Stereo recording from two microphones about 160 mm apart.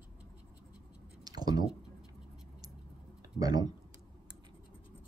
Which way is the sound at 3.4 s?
25° right (ahead or behind).